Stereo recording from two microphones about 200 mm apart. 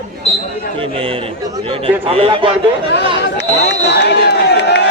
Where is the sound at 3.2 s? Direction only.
60° left (ahead or behind).